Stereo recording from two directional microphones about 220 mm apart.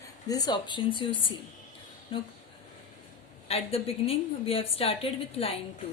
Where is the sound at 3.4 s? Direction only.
25° left (ahead or behind).